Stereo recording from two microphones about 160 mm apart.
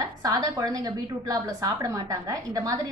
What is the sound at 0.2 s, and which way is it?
A woman's voice, 20° right (ahead or behind).